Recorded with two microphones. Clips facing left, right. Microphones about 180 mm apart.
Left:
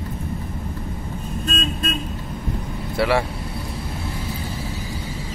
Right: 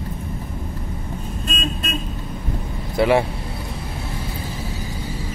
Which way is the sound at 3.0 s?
20° right (ahead or behind).